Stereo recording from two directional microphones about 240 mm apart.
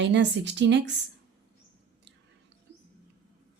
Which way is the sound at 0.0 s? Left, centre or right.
Right.